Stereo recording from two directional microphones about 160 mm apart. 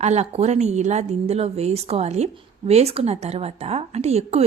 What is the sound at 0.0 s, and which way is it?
Speech, 45° right (ahead or behind).